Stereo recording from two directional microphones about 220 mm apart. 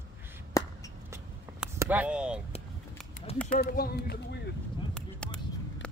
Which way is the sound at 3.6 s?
45° left (ahead or behind).